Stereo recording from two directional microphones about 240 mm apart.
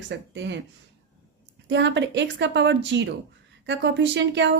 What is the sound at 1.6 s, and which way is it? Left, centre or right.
Speech, right.